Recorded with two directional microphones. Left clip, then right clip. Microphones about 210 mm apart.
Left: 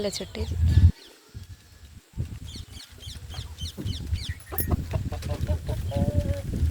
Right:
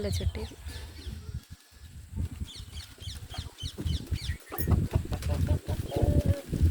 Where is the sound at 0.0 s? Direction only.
5° left (ahead or behind).